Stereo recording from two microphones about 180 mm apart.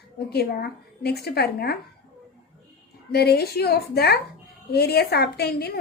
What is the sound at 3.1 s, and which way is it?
A woman's voice, 65° left (ahead or behind).